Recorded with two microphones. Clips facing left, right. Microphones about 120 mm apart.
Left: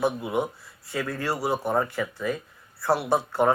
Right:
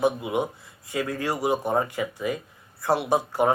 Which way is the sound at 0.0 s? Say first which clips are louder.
Right 1 dB; 15° right (ahead or behind).